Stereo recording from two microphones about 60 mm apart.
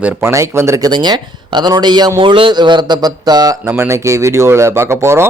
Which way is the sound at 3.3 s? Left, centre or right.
Right.